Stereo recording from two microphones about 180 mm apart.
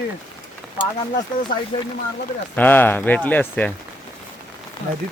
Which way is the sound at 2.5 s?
10° left (ahead or behind).